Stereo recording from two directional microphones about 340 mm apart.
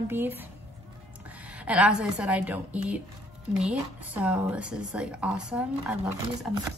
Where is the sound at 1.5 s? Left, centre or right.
Centre.